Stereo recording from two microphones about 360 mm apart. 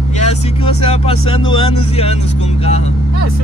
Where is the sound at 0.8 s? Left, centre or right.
Centre.